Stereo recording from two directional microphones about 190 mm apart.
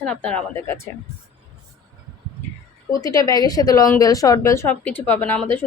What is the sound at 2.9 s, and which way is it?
A woman's voice, 20° left (ahead or behind).